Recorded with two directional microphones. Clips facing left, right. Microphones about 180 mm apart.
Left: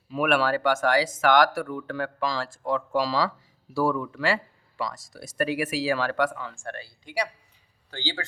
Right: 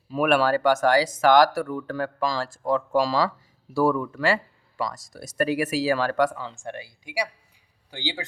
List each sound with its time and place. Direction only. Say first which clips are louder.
0.1 s speech: right 3 dB; 40° right (ahead or behind)
6.5 s speech: right 2 dB; 20° right (ahead or behind)